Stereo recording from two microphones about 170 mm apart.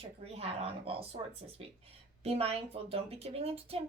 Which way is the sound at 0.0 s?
35° right (ahead or behind).